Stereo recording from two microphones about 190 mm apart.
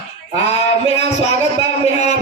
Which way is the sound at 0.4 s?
35° left (ahead or behind).